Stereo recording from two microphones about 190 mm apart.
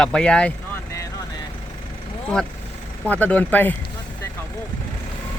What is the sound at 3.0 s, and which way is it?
Speech, 10° left (ahead or behind).